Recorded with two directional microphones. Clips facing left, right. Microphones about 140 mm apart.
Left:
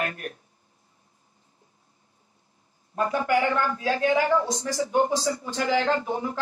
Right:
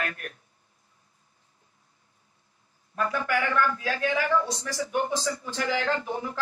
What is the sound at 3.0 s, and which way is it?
Speech, 25° left (ahead or behind).